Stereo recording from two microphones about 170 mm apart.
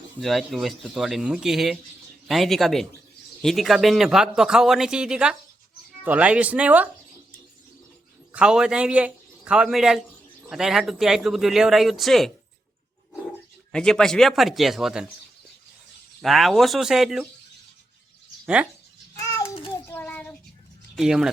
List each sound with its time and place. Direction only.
0.2 s speech: centre (ahead or behind)
8.3 s a man's voice: 5° right (ahead or behind)
13.7 s speech: 5° left (ahead or behind)
16.2 s speech: centre (ahead or behind)
18.4 s speech: 5° right (ahead or behind)
19.2 s a sound: 15° left (ahead or behind)
19.9 s child singing: 10° left (ahead or behind)
20.9 s speech: 5° right (ahead or behind)